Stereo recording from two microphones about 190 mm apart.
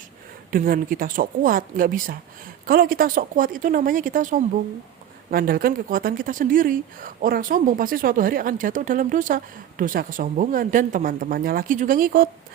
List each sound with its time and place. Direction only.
0.5 s speech: 50° right (ahead or behind)